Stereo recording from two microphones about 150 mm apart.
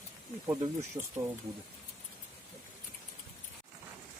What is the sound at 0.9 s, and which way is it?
Speech, 20° right (ahead or behind).